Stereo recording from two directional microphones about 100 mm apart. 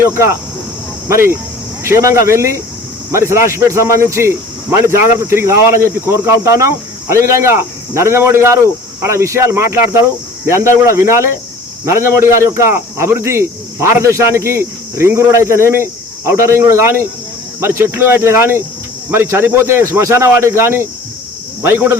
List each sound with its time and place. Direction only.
0.0 s speech: 30° right (ahead or behind)